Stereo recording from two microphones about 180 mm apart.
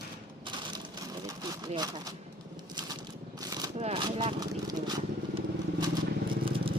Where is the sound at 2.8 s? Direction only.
25° right (ahead or behind).